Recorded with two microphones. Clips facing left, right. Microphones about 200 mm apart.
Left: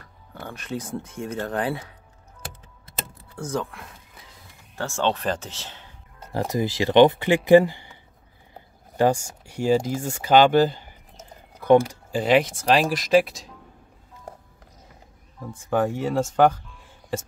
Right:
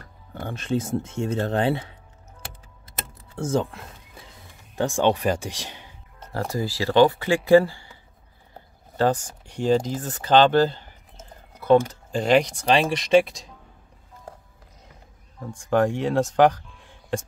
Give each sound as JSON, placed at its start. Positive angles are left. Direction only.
{"t": 0.3, "sound": "speech", "side_deg": -25}
{"t": 3.3, "sound": "speech", "side_deg": -25}
{"t": 6.1, "sound": "speech", "side_deg": 15}
{"t": 15.4, "sound": "speech", "side_deg": 5}